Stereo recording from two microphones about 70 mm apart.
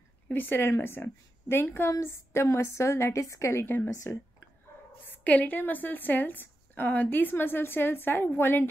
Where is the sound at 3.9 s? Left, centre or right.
Left.